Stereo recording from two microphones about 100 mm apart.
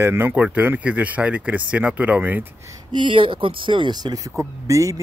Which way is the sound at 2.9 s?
60° right (ahead or behind).